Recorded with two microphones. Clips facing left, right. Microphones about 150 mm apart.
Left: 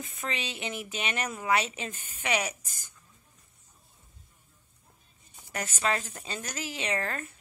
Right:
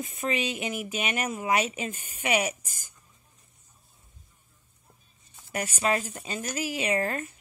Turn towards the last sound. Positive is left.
turn(degrees=-15)  # may be behind; listen again after turning